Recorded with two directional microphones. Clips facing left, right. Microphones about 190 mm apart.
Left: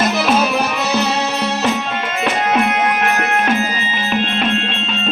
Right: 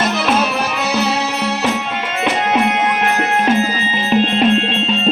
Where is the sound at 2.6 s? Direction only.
30° right (ahead or behind).